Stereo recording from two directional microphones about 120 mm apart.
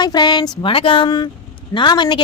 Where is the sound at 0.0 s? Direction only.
35° left (ahead or behind).